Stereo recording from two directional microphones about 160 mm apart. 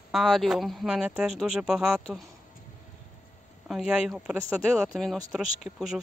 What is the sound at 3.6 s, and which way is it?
Speech, 5° right (ahead or behind).